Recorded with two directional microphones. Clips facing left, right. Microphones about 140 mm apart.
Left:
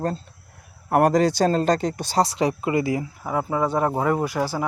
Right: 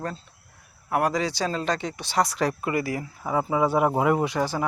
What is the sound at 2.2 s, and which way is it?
Speech, 25° left (ahead or behind).